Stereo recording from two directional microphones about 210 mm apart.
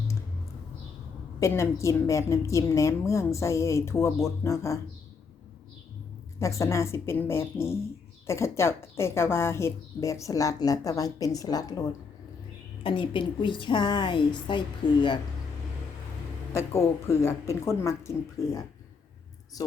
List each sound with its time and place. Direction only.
1.4 s a woman's voice: 15° left (ahead or behind)
6.4 s a woman's voice: 15° left (ahead or behind)
16.6 s a woman's voice: 15° left (ahead or behind)